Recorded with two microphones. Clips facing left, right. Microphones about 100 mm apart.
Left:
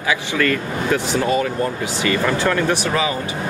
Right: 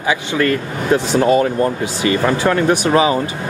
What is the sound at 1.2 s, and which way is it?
Speech, 30° right (ahead or behind).